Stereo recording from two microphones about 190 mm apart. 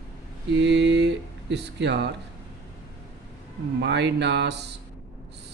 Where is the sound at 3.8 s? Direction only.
65° right (ahead or behind).